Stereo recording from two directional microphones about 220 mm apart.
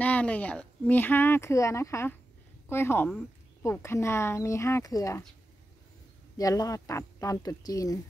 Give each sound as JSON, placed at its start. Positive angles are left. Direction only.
{"t": 0.0, "sound": "speech", "side_deg": 5}
{"t": 6.3, "sound": "speech", "side_deg": 15}